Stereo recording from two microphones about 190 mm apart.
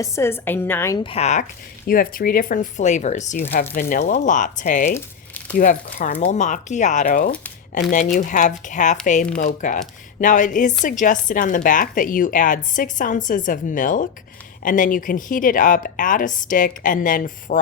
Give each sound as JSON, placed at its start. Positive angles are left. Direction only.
{"t": 0.0, "sound": "a woman's voice", "side_deg": 15}
{"t": 0.9, "sound": "speech", "side_deg": 30}
{"t": 1.9, "sound": "a woman's voice", "side_deg": 50}
{"t": 4.9, "sound": "a sound", "side_deg": 10}
{"t": 5.5, "sound": "a woman's voice", "side_deg": 45}